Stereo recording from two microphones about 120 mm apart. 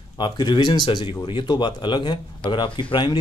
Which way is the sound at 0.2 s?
40° left (ahead or behind).